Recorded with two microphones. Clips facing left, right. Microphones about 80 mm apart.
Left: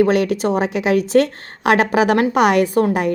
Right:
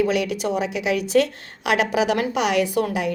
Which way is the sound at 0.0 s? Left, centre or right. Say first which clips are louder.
Left 6 dB; left.